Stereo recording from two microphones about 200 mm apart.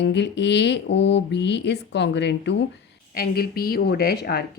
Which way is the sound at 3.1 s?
50° left (ahead or behind).